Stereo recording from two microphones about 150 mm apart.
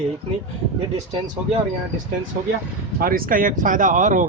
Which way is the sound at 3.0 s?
75° right (ahead or behind).